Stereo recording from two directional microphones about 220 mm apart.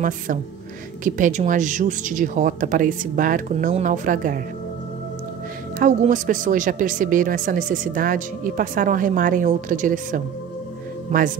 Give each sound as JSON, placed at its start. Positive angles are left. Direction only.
{"t": 1.0, "sound": "speech", "side_deg": -35}
{"t": 5.8, "sound": "a man's voice", "side_deg": -35}